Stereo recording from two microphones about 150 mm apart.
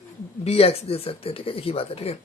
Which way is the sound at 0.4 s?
40° left (ahead or behind).